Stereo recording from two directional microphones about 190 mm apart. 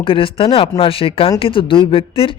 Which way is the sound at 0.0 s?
30° left (ahead or behind).